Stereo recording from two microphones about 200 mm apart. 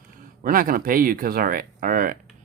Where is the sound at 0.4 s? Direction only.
45° right (ahead or behind).